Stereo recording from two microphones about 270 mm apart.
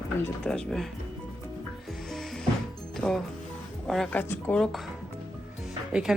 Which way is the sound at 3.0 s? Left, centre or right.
Centre.